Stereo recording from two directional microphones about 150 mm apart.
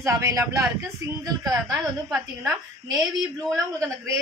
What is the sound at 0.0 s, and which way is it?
Speech, 20° right (ahead or behind).